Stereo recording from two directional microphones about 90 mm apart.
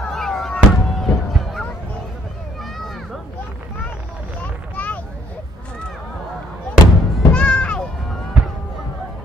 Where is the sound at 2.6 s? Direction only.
Centre (ahead or behind).